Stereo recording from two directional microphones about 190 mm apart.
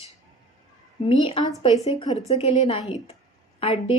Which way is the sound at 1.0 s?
30° left (ahead or behind).